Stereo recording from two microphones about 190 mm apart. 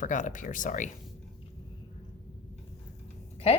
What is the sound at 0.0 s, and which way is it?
Speech, 40° left (ahead or behind).